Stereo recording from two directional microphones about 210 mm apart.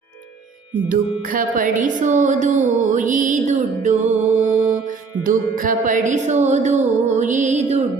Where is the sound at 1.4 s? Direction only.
40° right (ahead or behind).